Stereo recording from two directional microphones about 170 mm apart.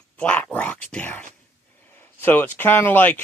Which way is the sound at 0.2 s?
5° left (ahead or behind).